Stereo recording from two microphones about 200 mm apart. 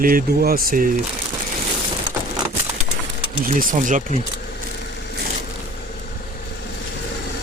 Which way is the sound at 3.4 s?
40° right (ahead or behind).